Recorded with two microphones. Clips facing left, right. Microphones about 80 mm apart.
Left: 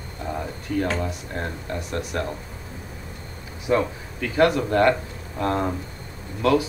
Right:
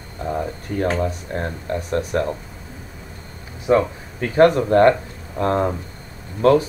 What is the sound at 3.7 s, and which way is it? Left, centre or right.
Speech, right.